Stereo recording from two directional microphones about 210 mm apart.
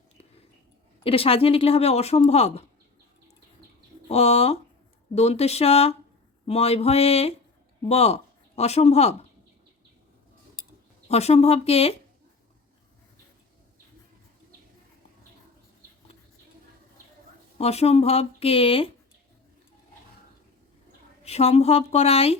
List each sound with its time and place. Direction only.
1.0 s speech: 25° left (ahead or behind)
4.1 s speech: 30° left (ahead or behind)
11.1 s speech: 30° left (ahead or behind)
17.6 s speech: 30° left (ahead or behind)
21.2 s a woman's voice: 30° left (ahead or behind)